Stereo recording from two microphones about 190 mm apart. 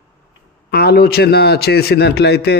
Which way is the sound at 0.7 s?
55° left (ahead or behind).